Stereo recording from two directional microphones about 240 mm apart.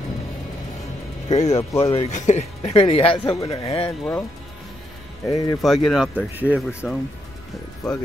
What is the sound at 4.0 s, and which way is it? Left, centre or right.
Speech, centre.